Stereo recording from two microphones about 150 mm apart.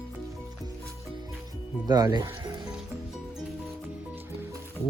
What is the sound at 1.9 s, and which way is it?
Speech, 25° right (ahead or behind).